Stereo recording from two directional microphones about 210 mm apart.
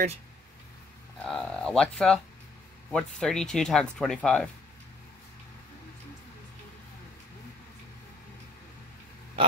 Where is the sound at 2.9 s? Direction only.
5° left (ahead or behind).